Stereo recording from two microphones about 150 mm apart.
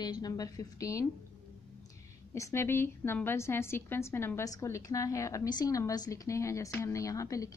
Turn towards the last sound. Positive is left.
turn(degrees=20)  # may be behind; listen again after turning